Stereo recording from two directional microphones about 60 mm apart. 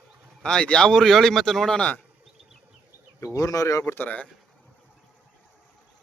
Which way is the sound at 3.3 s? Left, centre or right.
Left.